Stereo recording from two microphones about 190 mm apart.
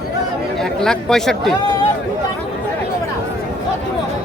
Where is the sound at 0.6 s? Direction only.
5° left (ahead or behind).